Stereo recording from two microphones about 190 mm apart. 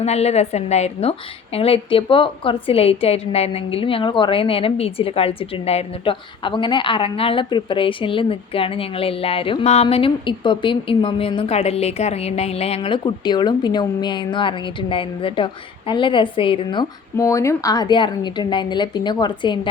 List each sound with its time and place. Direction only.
0.0 s a woman's voice: 35° left (ahead or behind)